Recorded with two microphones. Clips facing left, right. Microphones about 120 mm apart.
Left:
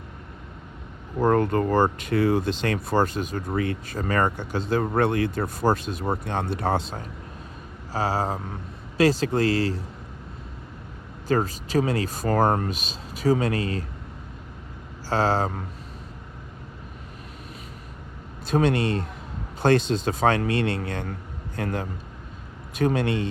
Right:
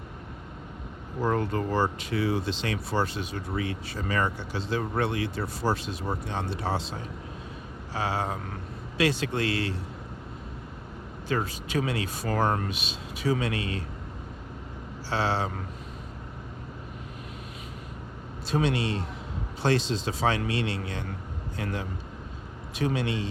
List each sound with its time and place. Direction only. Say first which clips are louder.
1.2 s speech: left 6 dB; 55° left (ahead or behind)
7.9 s speech: left 4 dB; 40° left (ahead or behind)
11.3 s speech: left 6 dB; 40° left (ahead or behind)
15.1 s speech: left 5 dB; 45° left (ahead or behind)
18.4 s speech: left 5 dB; 50° left (ahead or behind)